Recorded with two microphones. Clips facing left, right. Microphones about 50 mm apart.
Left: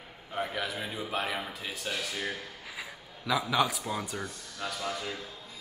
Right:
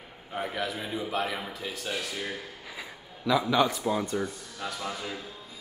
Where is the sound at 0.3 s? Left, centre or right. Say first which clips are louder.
Right 1 dB; centre.